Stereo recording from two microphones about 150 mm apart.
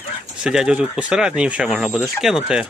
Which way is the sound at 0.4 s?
5° right (ahead or behind).